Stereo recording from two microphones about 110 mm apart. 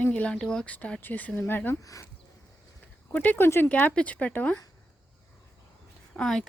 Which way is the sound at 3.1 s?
15° left (ahead or behind).